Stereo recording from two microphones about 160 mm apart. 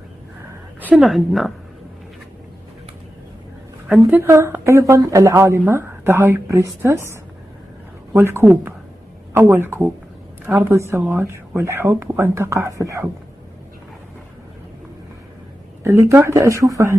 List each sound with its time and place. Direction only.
0.7 s a sound: 10° right (ahead or behind)
1.0 s a woman's voice: centre (ahead or behind)
3.9 s a woman's voice: 10° right (ahead or behind)
8.1 s a woman's voice: 15° right (ahead or behind)
15.8 s speech: 20° right (ahead or behind)